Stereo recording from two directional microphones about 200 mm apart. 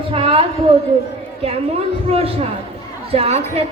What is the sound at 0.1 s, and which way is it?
Speech, 30° right (ahead or behind).